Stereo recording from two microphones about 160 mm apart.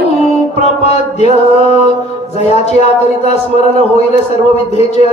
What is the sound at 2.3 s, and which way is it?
A man's voice, 40° left (ahead or behind).